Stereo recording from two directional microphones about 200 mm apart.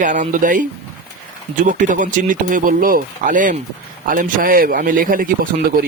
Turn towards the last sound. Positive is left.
turn(degrees=-45)  # may be behind; listen again after turning